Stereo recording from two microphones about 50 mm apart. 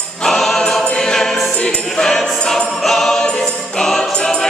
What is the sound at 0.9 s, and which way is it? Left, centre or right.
Choir, centre.